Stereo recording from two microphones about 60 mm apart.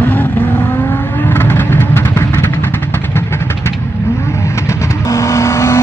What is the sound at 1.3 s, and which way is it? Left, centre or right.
Vehicle, left.